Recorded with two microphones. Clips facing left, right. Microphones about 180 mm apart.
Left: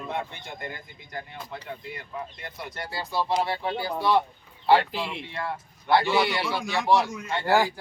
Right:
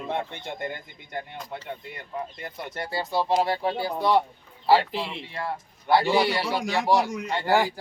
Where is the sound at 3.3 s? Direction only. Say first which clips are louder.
Right 4 dB; 40° right (ahead or behind).